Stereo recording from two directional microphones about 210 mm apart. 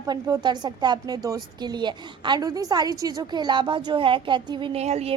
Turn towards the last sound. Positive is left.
turn(degrees=-30)  # may be behind; listen again after turning